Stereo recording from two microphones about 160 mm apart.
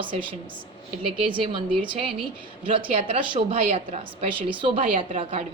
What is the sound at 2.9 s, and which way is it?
A woman's voice, 35° right (ahead or behind).